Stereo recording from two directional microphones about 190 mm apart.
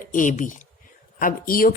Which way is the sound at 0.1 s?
40° left (ahead or behind).